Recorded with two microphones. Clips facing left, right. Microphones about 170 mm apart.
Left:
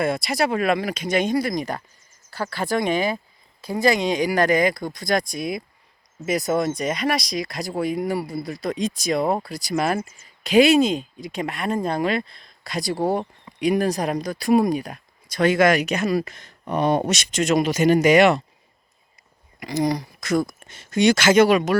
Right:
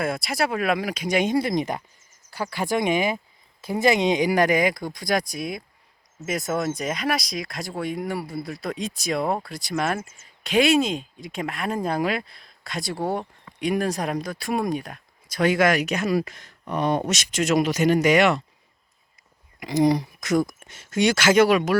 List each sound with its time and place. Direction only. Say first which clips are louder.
0.0 s speech: left 3 dB; 5° right (ahead or behind)
19.5 s speech: right 3 dB; 20° right (ahead or behind)